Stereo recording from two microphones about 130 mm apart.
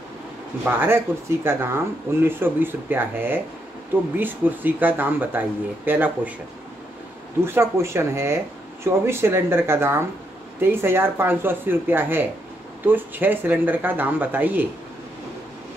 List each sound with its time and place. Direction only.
0.7 s speech: 15° right (ahead or behind)
7.4 s speech: 20° right (ahead or behind)